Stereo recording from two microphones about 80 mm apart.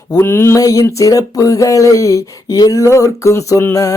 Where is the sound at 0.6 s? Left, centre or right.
Left.